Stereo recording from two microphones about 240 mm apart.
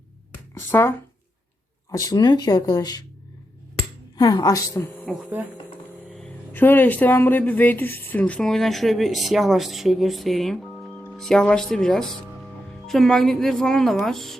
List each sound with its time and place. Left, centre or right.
0.5 s a sound: centre
1.9 s speech: centre
4.2 s speech: centre
5.1 s speech: centre
6.1 s speech: centre